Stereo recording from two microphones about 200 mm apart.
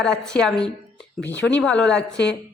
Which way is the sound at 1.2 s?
60° left (ahead or behind).